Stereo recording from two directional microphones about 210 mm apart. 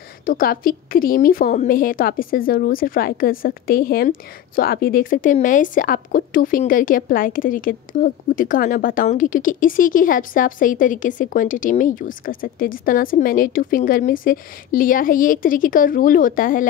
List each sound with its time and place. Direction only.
0.2 s a woman's voice: 45° left (ahead or behind)